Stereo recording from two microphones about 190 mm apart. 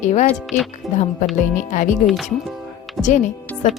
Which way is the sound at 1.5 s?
40° left (ahead or behind).